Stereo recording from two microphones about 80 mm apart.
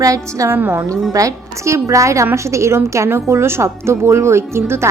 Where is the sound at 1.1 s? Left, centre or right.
Right.